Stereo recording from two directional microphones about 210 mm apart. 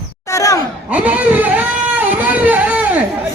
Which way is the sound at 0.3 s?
15° left (ahead or behind).